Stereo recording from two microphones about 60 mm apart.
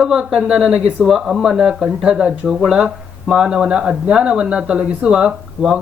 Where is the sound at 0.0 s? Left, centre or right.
Centre.